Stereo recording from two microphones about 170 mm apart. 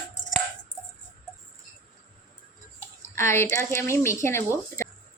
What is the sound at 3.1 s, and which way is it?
A woman's voice, 15° left (ahead or behind).